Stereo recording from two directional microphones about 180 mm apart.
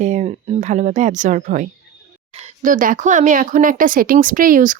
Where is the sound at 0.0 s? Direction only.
45° right (ahead or behind).